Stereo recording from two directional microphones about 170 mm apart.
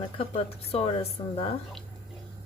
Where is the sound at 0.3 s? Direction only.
35° left (ahead or behind).